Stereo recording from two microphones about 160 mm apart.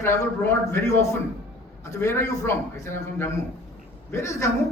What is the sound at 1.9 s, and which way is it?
A man's voice, 15° left (ahead or behind).